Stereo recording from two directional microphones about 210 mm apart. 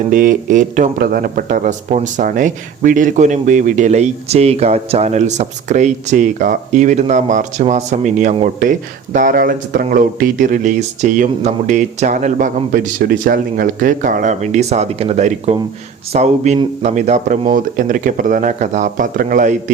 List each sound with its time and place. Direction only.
0.1 s speech: 40° right (ahead or behind)